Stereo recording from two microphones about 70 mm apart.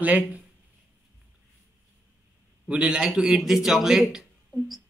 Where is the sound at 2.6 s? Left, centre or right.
Centre.